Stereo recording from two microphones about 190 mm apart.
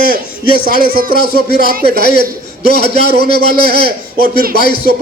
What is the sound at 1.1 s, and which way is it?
A man's voice, 50° left (ahead or behind).